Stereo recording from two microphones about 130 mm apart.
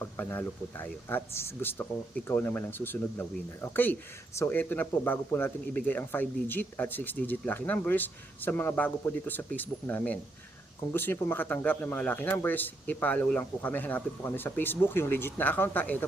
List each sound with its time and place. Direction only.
0.0 s a man's voice: 15° left (ahead or behind)